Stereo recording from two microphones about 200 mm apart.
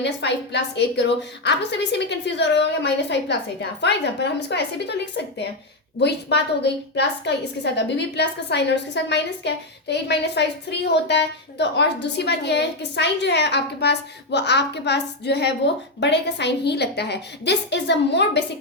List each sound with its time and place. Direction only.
0.0 s a woman's voice: 60° left (ahead or behind)